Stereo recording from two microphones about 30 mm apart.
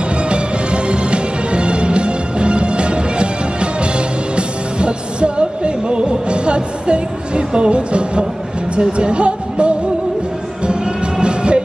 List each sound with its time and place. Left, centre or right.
0.3 s music: right
8.7 s speech: right
10.7 s music: right